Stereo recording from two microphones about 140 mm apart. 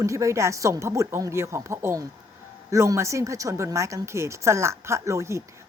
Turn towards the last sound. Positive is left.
turn(degrees=-20)  # may be behind; listen again after turning